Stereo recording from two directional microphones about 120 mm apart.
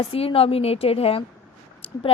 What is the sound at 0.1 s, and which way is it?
A woman's voice, 55° left (ahead or behind).